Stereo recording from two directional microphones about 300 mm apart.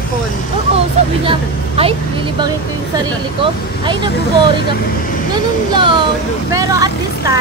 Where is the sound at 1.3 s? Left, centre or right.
Centre.